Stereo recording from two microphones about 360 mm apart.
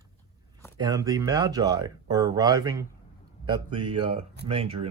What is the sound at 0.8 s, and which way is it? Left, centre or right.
Speech, centre.